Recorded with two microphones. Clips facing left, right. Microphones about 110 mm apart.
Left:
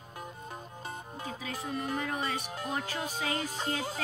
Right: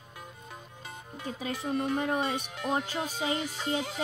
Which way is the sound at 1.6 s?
25° right (ahead or behind).